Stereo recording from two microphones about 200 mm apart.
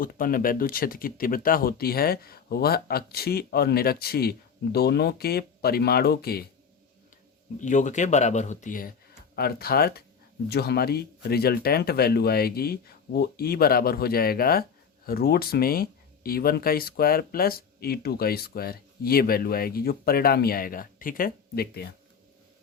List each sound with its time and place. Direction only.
0.0 s speech: 45° left (ahead or behind)
7.6 s speech: 40° left (ahead or behind)